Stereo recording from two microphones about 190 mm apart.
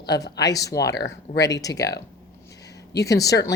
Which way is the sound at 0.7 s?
60° left (ahead or behind).